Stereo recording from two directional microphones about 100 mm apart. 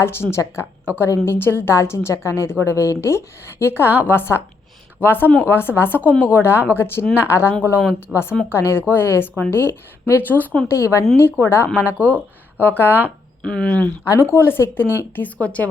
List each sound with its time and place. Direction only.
0.0 s a woman's voice: 25° left (ahead or behind)
13.4 s speech: 10° left (ahead or behind)
14.0 s a woman's voice: 30° left (ahead or behind); by 15.7 s 15° left (ahead or behind)